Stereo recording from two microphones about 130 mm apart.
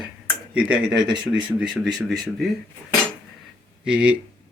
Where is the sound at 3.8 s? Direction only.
10° right (ahead or behind).